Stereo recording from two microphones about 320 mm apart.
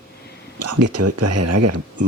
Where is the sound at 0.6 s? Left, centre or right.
Right.